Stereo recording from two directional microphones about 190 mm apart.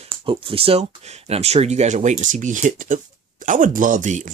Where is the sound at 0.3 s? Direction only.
30° right (ahead or behind).